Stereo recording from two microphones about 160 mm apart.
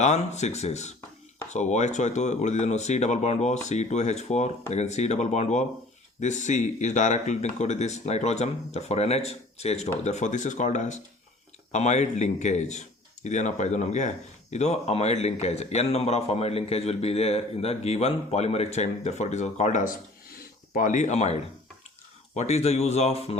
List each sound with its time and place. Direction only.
0.0 s a man's voice: 45° left (ahead or behind)
22.4 s speech: 40° left (ahead or behind)